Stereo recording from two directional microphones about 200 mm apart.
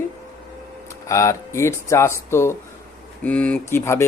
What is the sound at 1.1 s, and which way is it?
Speech, 15° left (ahead or behind).